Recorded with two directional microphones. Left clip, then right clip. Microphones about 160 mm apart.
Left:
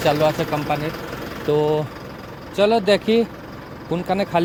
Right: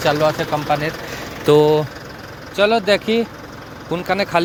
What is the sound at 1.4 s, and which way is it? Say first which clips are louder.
Speech: right 7 dB; 30° right (ahead or behind).